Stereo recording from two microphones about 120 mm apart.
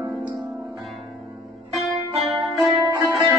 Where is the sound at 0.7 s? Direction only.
Centre (ahead or behind).